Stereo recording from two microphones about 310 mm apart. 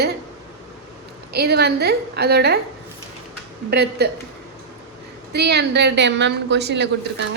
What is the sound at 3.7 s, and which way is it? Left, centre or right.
Speech, right.